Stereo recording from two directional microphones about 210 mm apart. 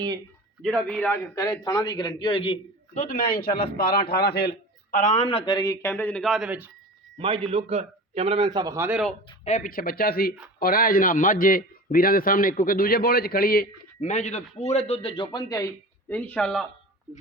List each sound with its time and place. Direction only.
0.6 s a man's voice: 5° left (ahead or behind)
1.4 s a man's voice: 20° left (ahead or behind); by 6.7 s 5° right (ahead or behind)
7.2 s a man's voice: 25° right (ahead or behind); by 9.1 s 5° right (ahead or behind)
9.4 s a man's voice: 35° left (ahead or behind); by 16.6 s 5° left (ahead or behind)